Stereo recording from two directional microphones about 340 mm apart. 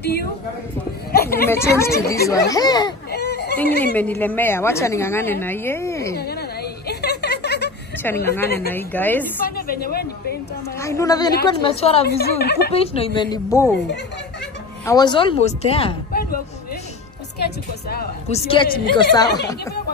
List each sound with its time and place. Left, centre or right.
1.1 s speech: left
1.5 s a woman's voice: centre
3.1 s baby cry: left
3.8 s a woman's voice: centre
6.1 s a sound: left
8.0 s a woman's voice: centre
9.6 s a woman's voice: left
10.8 s a woman's voice: centre
12.1 s a woman's voice: left
12.7 s a woman's voice: centre
14.9 s a woman's voice: centre
16.1 s a sound: left
17.8 s a woman's voice: left; by 19.7 s centre